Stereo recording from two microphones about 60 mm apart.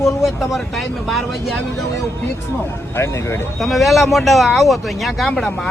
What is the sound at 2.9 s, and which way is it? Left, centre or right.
Speech, left.